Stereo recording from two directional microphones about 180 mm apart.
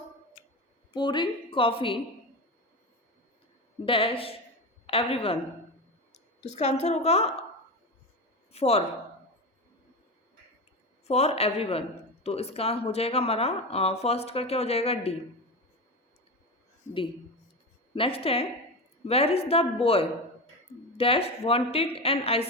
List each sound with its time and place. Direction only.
0.9 s a woman's voice: 25° left (ahead or behind)
3.8 s speech: 30° left (ahead or behind)
6.4 s speech: 40° left (ahead or behind)
8.5 s speech: 35° left (ahead or behind)
11.0 s speech: 35° left (ahead or behind)
17.9 s speech: 30° left (ahead or behind)